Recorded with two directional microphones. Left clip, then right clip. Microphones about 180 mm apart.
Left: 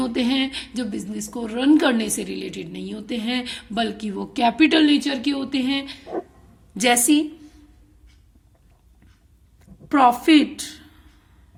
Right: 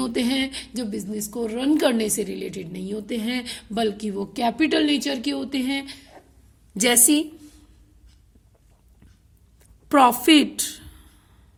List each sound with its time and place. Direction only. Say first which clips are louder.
0.0 s a woman's voice: left 2 dB; 30° right (ahead or behind); by 7.5 s 45° right (ahead or behind)
9.9 s a woman's voice: even; 45° right (ahead or behind)